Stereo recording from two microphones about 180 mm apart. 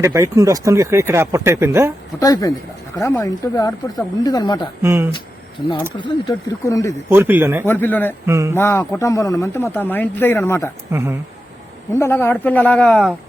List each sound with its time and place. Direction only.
0.0 s speech: 15° right (ahead or behind)
2.1 s speech: 20° left (ahead or behind)
4.8 s speech: 15° right (ahead or behind)
6.0 s speech: 25° left (ahead or behind)
7.1 s speech: 10° right (ahead or behind)
7.7 s speech: 10° left (ahead or behind)
8.3 s speech: 15° right (ahead or behind)
8.5 s speech: 15° left (ahead or behind)
10.9 s speech: 15° right (ahead or behind)
11.9 s speech: 15° left (ahead or behind)